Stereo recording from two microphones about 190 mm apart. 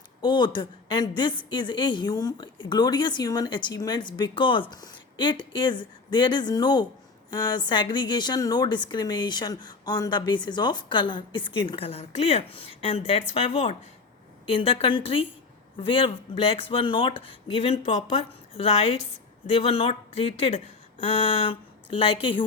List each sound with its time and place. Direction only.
0.2 s a woman's voice: 25° left (ahead or behind)